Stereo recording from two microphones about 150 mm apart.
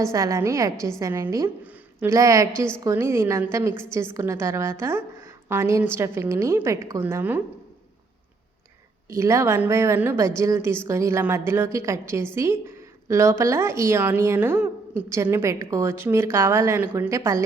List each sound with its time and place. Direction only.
0.0 s a woman's voice: 20° right (ahead or behind)
9.0 s a woman's voice: 20° right (ahead or behind)